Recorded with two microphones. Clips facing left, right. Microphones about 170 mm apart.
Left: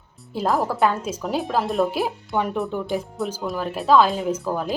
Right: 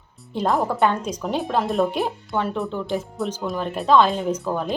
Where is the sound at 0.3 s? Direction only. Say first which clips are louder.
Right 1 dB; centre (ahead or behind).